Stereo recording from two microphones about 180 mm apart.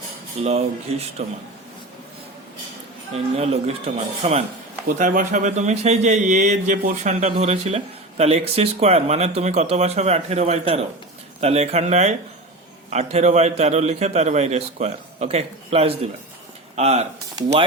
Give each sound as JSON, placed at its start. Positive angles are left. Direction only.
{"t": 0.3, "sound": "a man's voice", "side_deg": -35}
{"t": 3.1, "sound": "a man's voice", "side_deg": -35}
{"t": 4.9, "sound": "a man's voice", "side_deg": -45}